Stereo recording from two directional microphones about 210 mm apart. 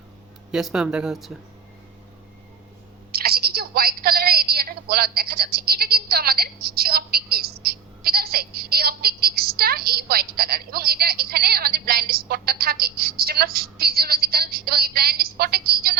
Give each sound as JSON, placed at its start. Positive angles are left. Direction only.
{"t": 0.5, "sound": "speech", "side_deg": -5}
{"t": 3.1, "sound": "a woman's voice", "side_deg": -45}